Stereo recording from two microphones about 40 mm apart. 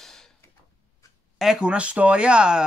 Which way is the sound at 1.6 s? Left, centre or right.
Right.